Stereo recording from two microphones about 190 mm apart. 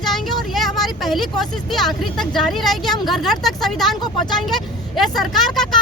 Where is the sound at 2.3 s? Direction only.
Centre (ahead or behind).